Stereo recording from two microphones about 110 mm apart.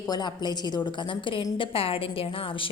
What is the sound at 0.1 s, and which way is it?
A woman's voice, 40° left (ahead or behind).